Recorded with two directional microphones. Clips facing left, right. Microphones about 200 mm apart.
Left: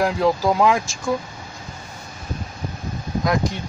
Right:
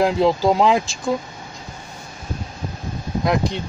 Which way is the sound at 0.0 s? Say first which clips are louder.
Right 2 dB; 25° right (ahead or behind).